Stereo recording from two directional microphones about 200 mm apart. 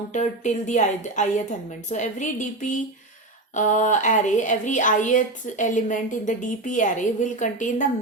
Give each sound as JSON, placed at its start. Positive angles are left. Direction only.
{"t": 0.1, "sound": "speech", "side_deg": 35}